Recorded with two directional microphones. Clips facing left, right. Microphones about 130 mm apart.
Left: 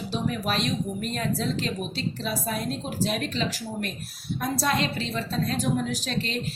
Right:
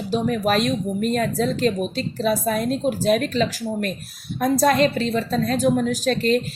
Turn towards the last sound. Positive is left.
turn(degrees=-45)  # may be behind; listen again after turning